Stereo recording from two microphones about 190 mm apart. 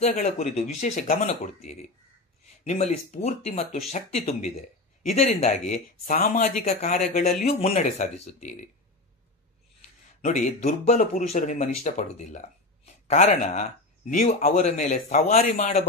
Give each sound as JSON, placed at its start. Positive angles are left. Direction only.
{"t": 0.0, "sound": "speech", "side_deg": 35}
{"t": 10.2, "sound": "speech", "side_deg": 40}